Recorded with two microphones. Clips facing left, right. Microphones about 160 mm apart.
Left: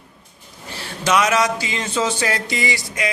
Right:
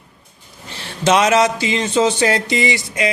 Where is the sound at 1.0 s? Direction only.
25° right (ahead or behind).